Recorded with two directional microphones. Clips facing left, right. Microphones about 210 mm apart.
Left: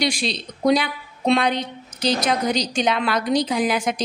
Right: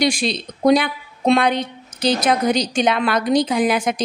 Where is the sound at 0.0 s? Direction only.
50° right (ahead or behind).